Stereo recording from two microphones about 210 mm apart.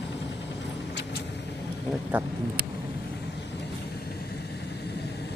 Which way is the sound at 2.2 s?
10° right (ahead or behind).